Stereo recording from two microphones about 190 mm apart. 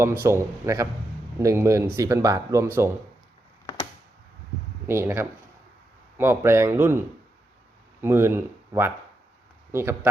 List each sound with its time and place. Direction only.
0.0 s speech: 10° right (ahead or behind)
4.9 s speech: 15° right (ahead or behind)
8.0 s speech: 10° right (ahead or behind)